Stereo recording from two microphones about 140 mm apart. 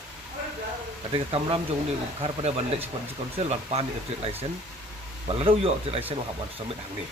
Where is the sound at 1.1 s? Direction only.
40° right (ahead or behind).